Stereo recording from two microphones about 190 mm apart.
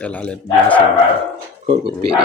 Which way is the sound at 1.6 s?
40° right (ahead or behind).